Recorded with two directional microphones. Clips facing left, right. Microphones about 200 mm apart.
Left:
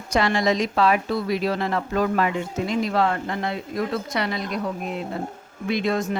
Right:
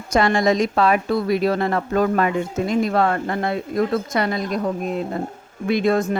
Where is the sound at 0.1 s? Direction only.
50° right (ahead or behind).